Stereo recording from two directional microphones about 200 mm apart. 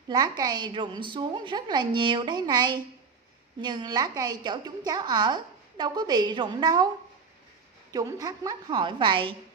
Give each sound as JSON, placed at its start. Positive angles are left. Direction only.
{"t": 0.1, "sound": "a woman's voice", "side_deg": -20}
{"t": 7.9, "sound": "a woman's voice", "side_deg": -15}